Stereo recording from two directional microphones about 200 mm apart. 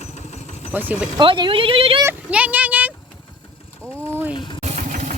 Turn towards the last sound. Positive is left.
turn(degrees=-40)  # may be behind; listen again after turning